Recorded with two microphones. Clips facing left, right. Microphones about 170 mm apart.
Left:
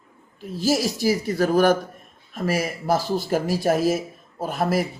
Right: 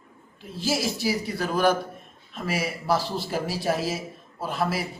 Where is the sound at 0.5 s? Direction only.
40° left (ahead or behind).